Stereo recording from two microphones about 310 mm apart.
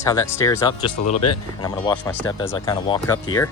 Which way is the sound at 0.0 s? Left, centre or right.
Centre.